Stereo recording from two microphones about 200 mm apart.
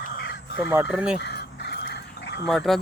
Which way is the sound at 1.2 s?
55° left (ahead or behind).